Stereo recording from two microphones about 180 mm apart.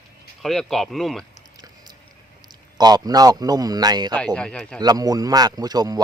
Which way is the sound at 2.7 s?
20° right (ahead or behind).